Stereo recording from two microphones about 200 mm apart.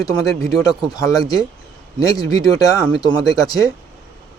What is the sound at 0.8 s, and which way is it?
Speech, 20° left (ahead or behind).